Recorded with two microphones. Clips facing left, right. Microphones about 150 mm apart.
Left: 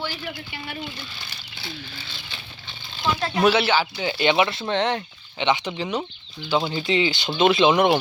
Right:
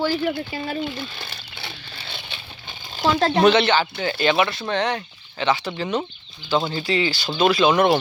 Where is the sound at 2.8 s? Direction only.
45° right (ahead or behind).